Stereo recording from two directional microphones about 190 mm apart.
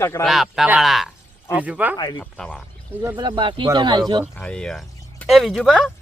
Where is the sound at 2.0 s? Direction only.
20° left (ahead or behind).